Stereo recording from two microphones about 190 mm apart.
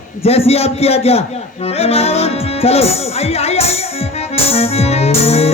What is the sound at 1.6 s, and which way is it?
Music, 30° left (ahead or behind).